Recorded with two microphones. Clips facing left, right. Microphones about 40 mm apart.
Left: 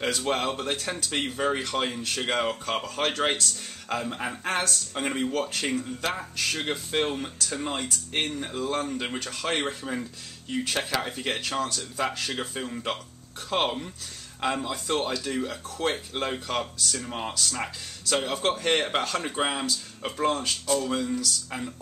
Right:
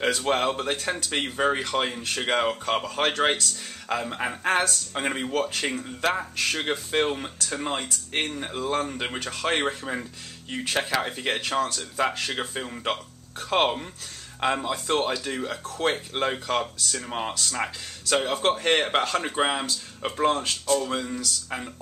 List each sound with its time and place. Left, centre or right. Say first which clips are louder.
0.2 s speech: right 3 dB; centre